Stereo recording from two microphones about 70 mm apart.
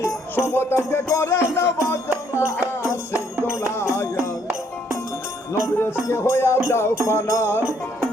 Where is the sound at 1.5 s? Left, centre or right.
Left.